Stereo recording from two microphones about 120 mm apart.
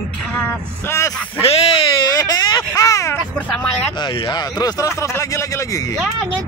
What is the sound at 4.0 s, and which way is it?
Speech, 35° left (ahead or behind).